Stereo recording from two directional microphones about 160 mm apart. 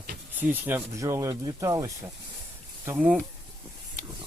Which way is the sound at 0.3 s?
10° right (ahead or behind).